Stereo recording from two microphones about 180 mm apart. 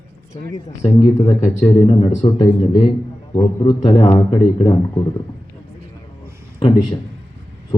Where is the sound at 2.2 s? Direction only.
35° left (ahead or behind).